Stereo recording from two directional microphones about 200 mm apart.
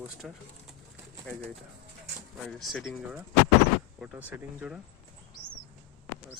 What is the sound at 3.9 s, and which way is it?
Speech, 5° right (ahead or behind).